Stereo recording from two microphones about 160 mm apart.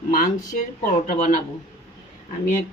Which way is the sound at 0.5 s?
50° left (ahead or behind).